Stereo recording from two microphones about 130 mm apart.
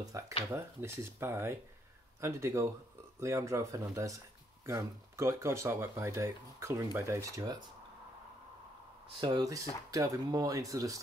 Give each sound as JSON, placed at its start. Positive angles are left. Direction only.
{"t": 0.1, "sound": "speech", "side_deg": -25}
{"t": 9.2, "sound": "speech", "side_deg": -30}